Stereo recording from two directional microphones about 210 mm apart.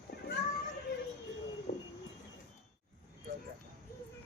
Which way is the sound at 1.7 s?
45° left (ahead or behind).